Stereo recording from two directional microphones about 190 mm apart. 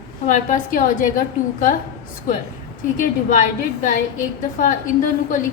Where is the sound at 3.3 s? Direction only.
45° left (ahead or behind).